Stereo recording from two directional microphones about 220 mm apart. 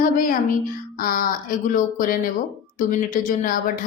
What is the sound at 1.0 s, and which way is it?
A woman's voice, 40° left (ahead or behind).